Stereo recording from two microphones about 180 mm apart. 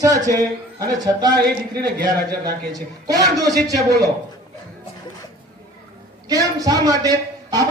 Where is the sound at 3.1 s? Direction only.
20° right (ahead or behind).